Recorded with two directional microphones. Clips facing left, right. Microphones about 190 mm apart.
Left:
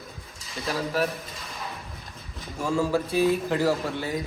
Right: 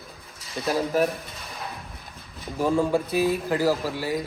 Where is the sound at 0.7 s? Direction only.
45° right (ahead or behind).